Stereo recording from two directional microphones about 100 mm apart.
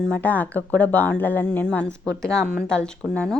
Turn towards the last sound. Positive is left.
turn(degrees=10)  # may be behind; listen again after turning